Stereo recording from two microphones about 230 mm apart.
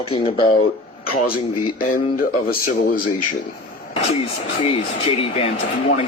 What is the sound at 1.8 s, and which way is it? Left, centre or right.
Speech, left.